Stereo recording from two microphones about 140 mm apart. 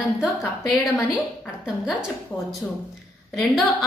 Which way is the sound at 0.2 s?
5° right (ahead or behind).